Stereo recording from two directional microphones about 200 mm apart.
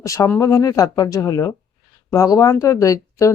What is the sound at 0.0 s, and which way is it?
Speech, 15° left (ahead or behind).